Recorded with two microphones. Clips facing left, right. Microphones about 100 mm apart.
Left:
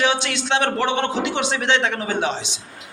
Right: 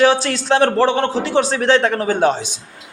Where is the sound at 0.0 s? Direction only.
40° right (ahead or behind).